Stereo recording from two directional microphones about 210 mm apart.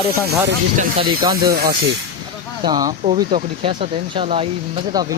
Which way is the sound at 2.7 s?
20° right (ahead or behind).